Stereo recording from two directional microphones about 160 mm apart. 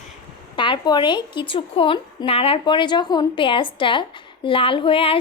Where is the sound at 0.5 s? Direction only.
30° left (ahead or behind).